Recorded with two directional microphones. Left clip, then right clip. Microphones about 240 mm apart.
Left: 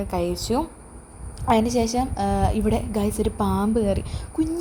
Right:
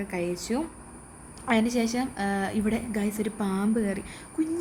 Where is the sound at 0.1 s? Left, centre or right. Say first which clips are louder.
Left 6 dB; centre.